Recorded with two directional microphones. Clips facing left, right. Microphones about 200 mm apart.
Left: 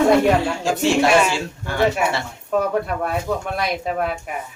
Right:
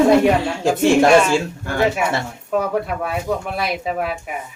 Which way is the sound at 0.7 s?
50° right (ahead or behind).